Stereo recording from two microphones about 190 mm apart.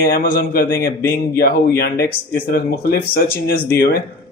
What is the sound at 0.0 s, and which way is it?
A man's voice, 50° left (ahead or behind).